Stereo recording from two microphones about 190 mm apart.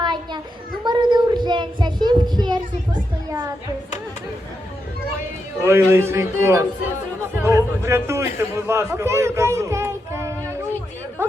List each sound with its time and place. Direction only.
0.9 s child singing: 25° right (ahead or behind)
5.6 s speech: 15° right (ahead or behind)